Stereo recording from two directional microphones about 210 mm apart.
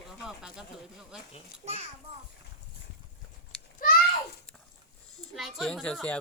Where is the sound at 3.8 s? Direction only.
40° left (ahead or behind).